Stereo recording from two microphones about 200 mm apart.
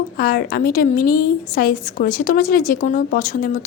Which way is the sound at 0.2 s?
50° left (ahead or behind).